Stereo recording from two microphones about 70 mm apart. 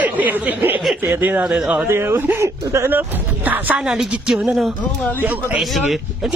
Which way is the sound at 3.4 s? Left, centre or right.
Right.